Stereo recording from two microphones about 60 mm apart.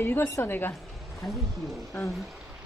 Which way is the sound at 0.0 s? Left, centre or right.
Left.